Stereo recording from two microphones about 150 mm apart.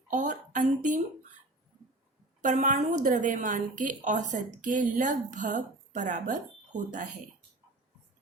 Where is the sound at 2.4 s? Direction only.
55° right (ahead or behind).